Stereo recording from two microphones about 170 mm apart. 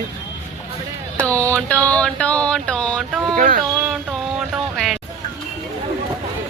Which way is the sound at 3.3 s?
50° right (ahead or behind).